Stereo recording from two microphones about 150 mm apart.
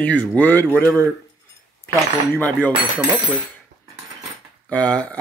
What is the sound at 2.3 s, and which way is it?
Speech, 10° left (ahead or behind).